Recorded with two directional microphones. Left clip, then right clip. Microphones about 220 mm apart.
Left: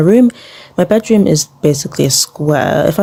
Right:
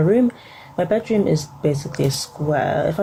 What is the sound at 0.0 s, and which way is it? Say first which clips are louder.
Speech: left 7 dB; 45° left (ahead or behind).